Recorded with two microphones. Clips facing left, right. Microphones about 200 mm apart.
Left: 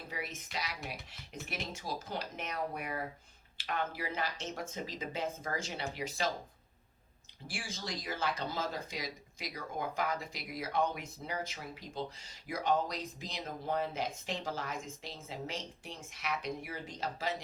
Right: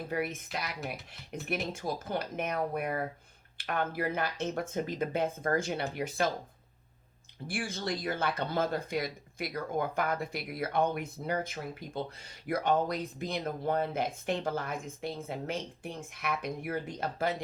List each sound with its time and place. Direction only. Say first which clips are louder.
0.1 s speech: right 8 dB; 55° right (ahead or behind)
7.4 s speech: right 8 dB; 55° right (ahead or behind)